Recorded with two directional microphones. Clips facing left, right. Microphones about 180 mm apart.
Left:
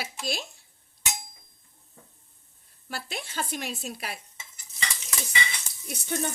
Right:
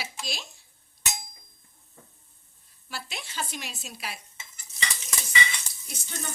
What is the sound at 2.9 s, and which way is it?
Speech, 50° left (ahead or behind).